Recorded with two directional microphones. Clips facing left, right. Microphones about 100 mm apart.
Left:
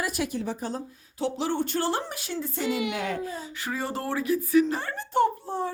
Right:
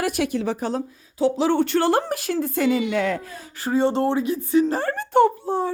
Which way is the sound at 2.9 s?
90° right.